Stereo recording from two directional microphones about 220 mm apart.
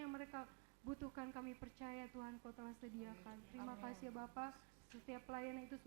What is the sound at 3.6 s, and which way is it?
A woman's voice, 25° right (ahead or behind).